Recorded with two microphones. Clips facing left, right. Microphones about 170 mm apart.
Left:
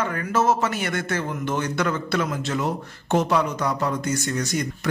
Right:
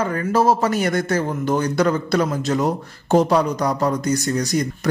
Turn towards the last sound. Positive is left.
turn(degrees=-35)  # may be behind; listen again after turning